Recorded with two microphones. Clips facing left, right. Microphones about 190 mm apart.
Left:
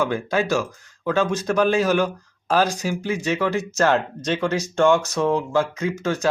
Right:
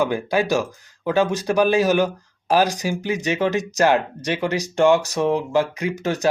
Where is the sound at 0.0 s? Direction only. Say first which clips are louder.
Right 2 dB; 15° right (ahead or behind).